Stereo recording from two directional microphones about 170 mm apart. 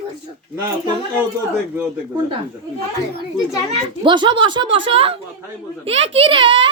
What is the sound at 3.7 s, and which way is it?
A child's voice, 25° right (ahead or behind).